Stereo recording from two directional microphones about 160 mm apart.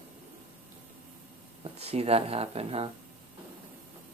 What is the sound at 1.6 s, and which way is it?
Speech, 40° right (ahead or behind).